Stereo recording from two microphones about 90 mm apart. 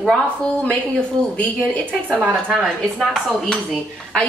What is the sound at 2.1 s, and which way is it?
Speech, 20° right (ahead or behind).